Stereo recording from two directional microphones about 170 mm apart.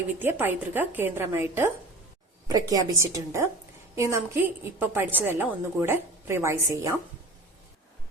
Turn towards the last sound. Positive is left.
turn(degrees=-20)  # may be behind; listen again after turning